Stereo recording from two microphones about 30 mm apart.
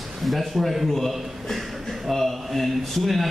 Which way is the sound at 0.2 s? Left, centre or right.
Centre.